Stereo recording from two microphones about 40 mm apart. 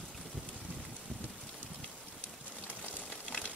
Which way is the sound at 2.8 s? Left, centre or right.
Left.